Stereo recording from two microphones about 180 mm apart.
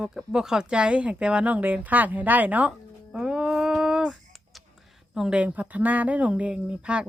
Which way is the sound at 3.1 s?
5° right (ahead or behind).